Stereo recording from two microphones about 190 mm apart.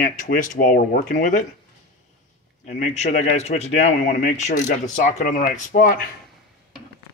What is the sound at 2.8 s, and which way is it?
Speech, 40° left (ahead or behind).